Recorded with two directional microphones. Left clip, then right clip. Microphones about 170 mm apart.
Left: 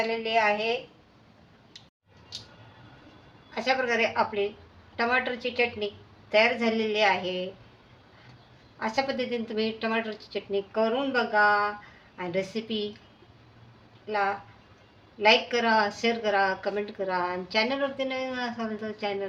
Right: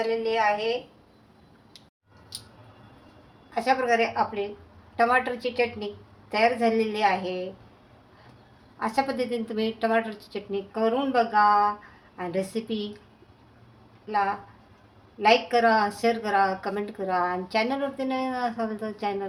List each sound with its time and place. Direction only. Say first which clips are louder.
0.2 s a woman's voice: left 1 dB; 25° right (ahead or behind)
3.5 s a woman's voice: right 3 dB; 20° right (ahead or behind)
8.8 s a woman's voice: right 2 dB; 20° right (ahead or behind)
14.1 s a woman's voice: right 2 dB; 20° right (ahead or behind)